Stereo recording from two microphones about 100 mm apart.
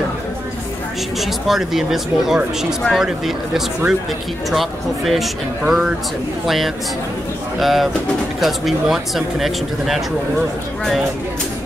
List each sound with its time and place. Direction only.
1.1 s speech: centre (ahead or behind)